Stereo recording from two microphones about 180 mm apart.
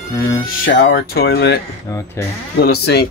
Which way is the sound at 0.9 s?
60° left (ahead or behind).